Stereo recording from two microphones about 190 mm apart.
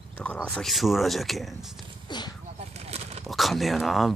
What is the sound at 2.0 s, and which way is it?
Speech, 25° left (ahead or behind).